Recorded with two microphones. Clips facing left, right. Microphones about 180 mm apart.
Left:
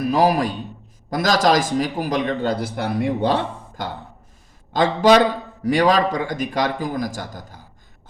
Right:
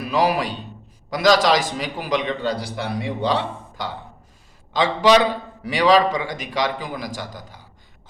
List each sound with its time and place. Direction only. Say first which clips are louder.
0.0 s a man's voice: left 3 dB; 45° left (ahead or behind)